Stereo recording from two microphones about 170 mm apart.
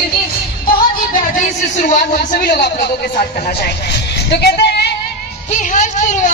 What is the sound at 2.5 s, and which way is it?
Speech, 70° left (ahead or behind).